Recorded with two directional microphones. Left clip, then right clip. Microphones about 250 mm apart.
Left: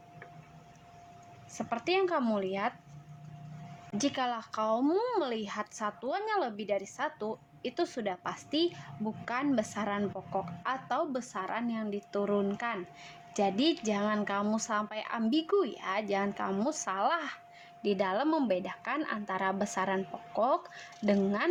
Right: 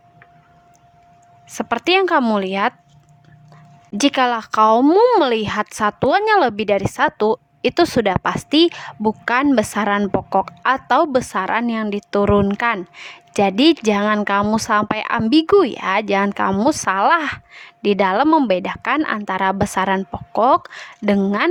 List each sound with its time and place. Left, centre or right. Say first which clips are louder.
1.5 s speech: right 15 dB; right
3.9 s speech: right 16 dB; right